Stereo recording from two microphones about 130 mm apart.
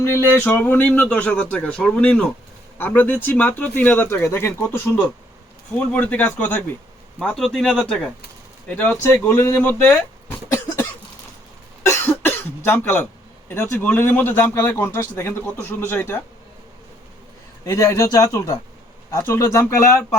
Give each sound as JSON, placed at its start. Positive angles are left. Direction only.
{"t": 0.0, "sound": "speech", "side_deg": 20}
{"t": 11.8, "sound": "cough", "side_deg": 20}
{"t": 13.5, "sound": "speech", "side_deg": 15}
{"t": 17.7, "sound": "speech", "side_deg": 25}